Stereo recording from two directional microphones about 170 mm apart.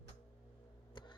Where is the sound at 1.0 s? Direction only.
30° left (ahead or behind).